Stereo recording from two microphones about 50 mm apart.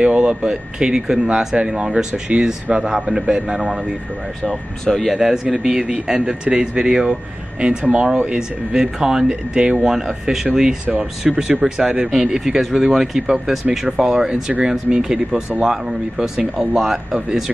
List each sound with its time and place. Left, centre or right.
0.0 s speech: right
4.4 s speech: centre